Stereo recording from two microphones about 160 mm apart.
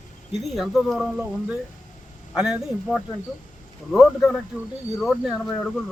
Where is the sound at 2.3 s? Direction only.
5° right (ahead or behind).